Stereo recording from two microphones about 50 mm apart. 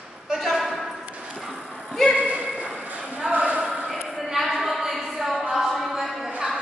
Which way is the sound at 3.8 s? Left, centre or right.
Centre.